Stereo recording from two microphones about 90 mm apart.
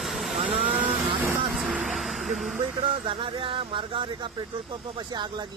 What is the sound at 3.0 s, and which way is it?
Speech, 75° right (ahead or behind).